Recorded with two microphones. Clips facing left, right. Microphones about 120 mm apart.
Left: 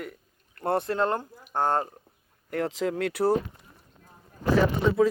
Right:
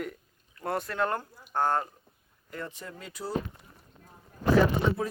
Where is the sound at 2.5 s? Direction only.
85° left; by 3.3 s 70° left (ahead or behind).